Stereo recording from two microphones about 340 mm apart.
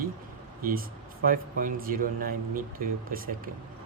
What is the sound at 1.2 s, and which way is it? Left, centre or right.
Speech, right.